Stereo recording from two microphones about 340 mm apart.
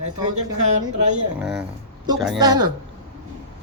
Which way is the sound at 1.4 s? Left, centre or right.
Centre.